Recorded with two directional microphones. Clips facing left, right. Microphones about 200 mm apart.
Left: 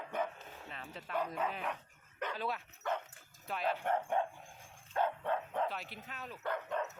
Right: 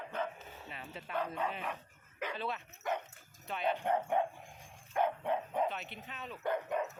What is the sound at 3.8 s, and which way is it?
Speech, 15° right (ahead or behind).